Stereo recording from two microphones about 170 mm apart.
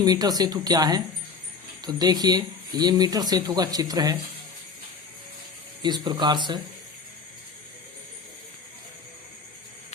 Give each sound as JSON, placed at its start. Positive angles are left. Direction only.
{"t": 0.0, "sound": "speech", "side_deg": -20}
{"t": 5.8, "sound": "speech", "side_deg": -25}